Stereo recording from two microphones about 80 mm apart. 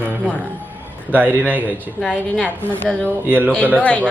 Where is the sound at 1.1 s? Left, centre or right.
Right.